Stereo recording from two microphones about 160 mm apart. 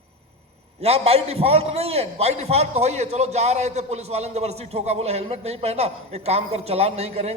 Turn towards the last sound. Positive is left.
turn(degrees=-40)  # may be behind; listen again after turning